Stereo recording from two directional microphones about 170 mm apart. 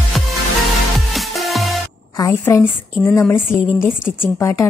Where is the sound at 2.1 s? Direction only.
15° left (ahead or behind).